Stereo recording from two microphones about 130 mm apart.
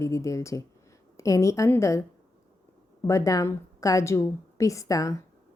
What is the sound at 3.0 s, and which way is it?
A woman's voice, 25° left (ahead or behind).